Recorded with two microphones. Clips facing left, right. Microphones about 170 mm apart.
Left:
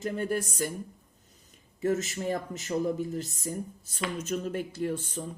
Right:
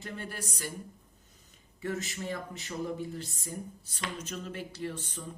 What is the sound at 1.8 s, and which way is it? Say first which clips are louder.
Speech: left 7 dB; 40° left (ahead or behind).